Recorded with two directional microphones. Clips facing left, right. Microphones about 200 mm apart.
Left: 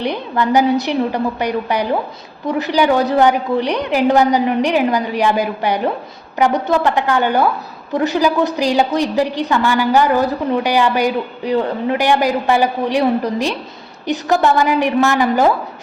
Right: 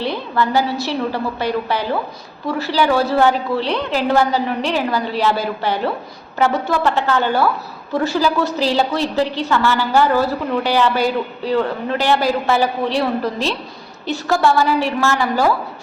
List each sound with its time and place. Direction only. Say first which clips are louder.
0.0 s a woman's voice: left 1 dB; 15° left (ahead or behind)